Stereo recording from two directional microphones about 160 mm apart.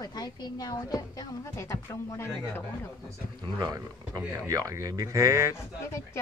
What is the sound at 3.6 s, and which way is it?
Speech, 25° right (ahead or behind).